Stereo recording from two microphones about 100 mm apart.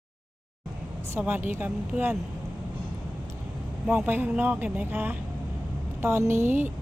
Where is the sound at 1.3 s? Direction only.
20° right (ahead or behind).